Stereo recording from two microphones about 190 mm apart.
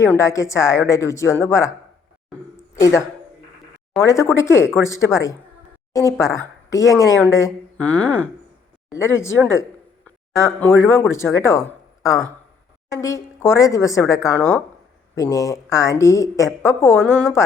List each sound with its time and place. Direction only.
0.0 s speech: 15° left (ahead or behind)
4.0 s speech: 15° left (ahead or behind)
12.9 s speech: 15° left (ahead or behind)